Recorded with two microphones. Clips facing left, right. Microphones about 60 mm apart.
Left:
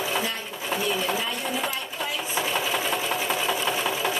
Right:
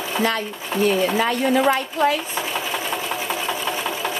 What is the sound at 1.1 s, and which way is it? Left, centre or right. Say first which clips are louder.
Speech: right 9 dB; right.